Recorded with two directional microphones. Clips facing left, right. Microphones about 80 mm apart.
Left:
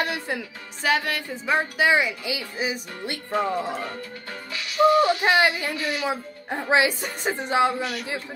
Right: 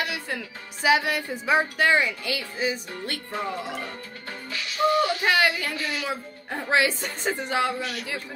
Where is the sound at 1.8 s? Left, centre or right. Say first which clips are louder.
Left 1 dB; centre.